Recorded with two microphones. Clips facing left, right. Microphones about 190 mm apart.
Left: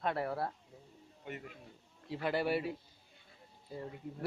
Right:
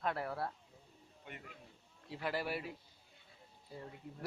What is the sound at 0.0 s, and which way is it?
Speech, 20° left (ahead or behind).